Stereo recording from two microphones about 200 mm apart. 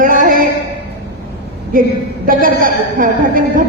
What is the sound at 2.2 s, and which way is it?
A man's voice, 45° right (ahead or behind).